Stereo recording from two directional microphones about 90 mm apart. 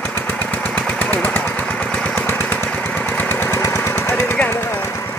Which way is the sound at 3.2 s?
25° left (ahead or behind).